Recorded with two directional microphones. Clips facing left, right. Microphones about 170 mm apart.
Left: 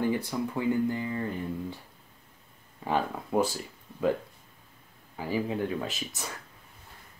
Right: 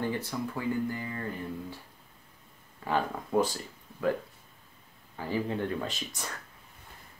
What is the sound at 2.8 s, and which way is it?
Speech, 10° left (ahead or behind).